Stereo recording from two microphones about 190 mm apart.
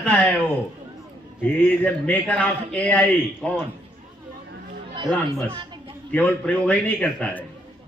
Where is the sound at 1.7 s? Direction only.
10° left (ahead or behind).